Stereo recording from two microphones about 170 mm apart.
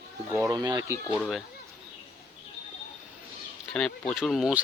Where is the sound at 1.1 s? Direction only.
10° left (ahead or behind).